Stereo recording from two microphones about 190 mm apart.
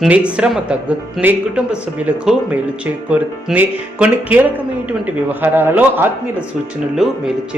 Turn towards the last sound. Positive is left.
turn(degrees=0)  # may be behind; listen again after turning